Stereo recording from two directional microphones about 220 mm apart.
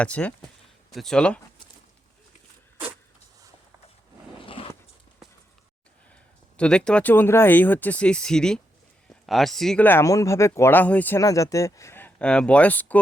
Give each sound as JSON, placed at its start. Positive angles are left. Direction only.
{"t": 0.0, "sound": "speech", "side_deg": 5}
{"t": 4.4, "sound": "biting", "side_deg": 25}
{"t": 6.6, "sound": "speech", "side_deg": 5}